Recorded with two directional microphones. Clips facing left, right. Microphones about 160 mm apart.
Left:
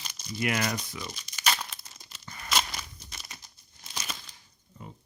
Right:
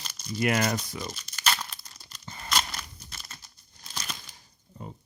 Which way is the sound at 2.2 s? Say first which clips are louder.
Right 2 dB; 30° right (ahead or behind).